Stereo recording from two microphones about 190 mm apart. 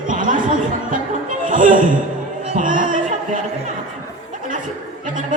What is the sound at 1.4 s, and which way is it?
Music, 45° right (ahead or behind).